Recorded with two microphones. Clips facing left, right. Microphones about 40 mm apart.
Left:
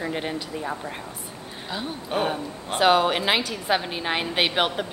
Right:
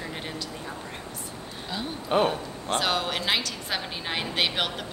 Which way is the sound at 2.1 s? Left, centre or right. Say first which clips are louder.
Right 3 dB; centre.